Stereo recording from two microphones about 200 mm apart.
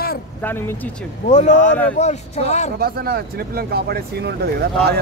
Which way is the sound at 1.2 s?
30° left (ahead or behind).